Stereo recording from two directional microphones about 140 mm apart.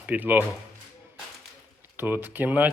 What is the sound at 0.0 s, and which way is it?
Speech, 10° right (ahead or behind).